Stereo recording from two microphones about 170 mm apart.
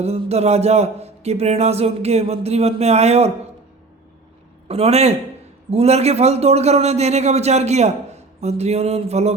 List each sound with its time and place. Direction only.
0.0 s a man's voice: 40° right (ahead or behind)
4.7 s a man's voice: 40° right (ahead or behind)